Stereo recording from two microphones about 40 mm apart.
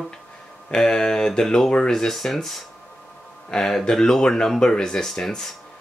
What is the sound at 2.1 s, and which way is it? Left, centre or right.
Speech, centre.